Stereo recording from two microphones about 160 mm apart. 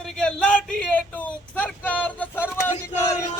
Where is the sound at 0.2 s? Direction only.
5° left (ahead or behind).